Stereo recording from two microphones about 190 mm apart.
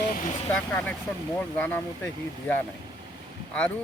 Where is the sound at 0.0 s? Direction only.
45° left (ahead or behind).